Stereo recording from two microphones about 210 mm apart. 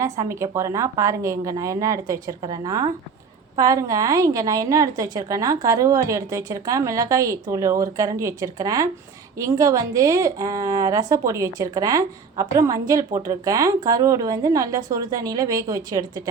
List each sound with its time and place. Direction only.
0.0 s a woman's voice: 15° right (ahead or behind)